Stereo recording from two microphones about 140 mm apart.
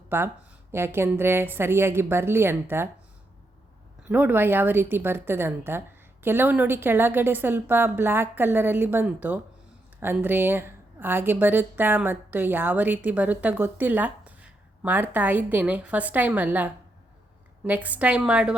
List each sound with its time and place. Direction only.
0.1 s a woman's voice: 15° right (ahead or behind)
4.1 s a woman's voice: 15° right (ahead or behind)